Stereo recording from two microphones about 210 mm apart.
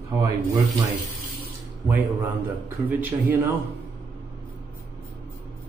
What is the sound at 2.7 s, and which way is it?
Speech, 10° right (ahead or behind).